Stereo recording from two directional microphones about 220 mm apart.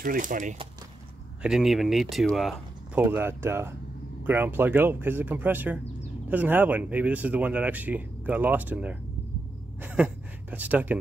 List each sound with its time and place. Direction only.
0.0 s speech: 35° right (ahead or behind)
1.4 s speech: centre (ahead or behind)